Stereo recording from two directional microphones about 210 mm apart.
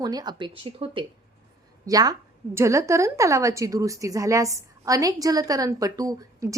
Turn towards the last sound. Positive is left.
turn(degrees=-15)  # may be behind; listen again after turning